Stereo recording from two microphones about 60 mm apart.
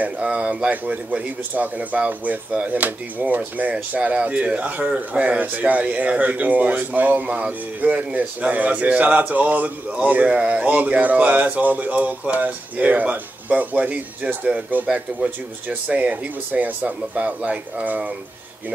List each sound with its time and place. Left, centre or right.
0.0 s speech: centre